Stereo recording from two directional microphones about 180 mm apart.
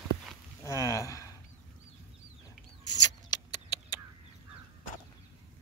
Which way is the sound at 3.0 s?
25° left (ahead or behind).